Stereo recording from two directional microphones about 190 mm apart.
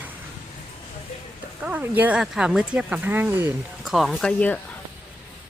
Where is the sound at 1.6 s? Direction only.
5° right (ahead or behind).